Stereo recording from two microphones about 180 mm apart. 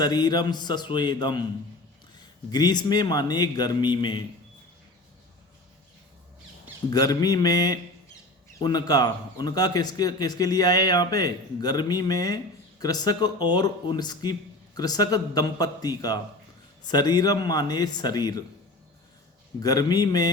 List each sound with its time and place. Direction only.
0.0 s a man's voice: 25° left (ahead or behind)
2.5 s a man's voice: 25° left (ahead or behind)
6.9 s a man's voice: 20° left (ahead or behind)
19.6 s a man's voice: 20° left (ahead or behind)